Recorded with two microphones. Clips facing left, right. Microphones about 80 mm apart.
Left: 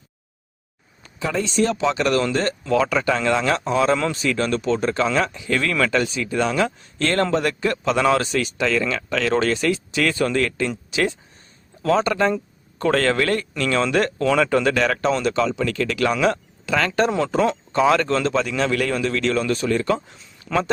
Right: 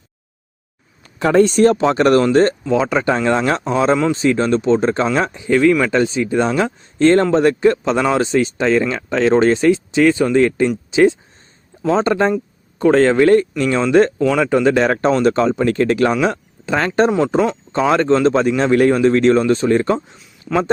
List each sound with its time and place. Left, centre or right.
1.2 s speech: right
2.6 s speech: right
5.5 s speech: centre
14.2 s speech: centre; by 14.9 s right
15.2 s speech: right
17.1 s speech: centre
17.7 s speech: right
20.1 s speech: centre